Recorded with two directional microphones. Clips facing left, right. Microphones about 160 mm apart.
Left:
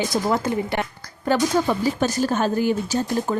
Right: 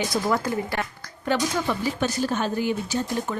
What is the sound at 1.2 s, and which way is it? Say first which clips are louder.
A woman's voice: left 5 dB; 40° left (ahead or behind).